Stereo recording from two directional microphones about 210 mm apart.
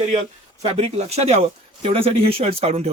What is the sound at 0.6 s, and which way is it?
Speech, 30° right (ahead or behind).